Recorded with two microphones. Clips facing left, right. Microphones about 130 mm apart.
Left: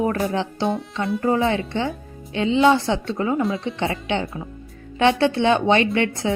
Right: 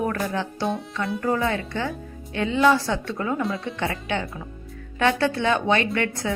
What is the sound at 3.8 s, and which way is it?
A woman's voice, 25° left (ahead or behind).